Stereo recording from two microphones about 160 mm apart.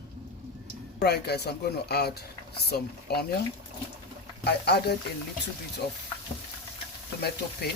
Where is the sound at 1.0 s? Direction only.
90° left.